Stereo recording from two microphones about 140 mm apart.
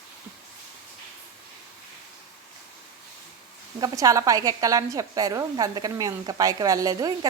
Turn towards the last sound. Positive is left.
turn(degrees=-25)  # may be behind; listen again after turning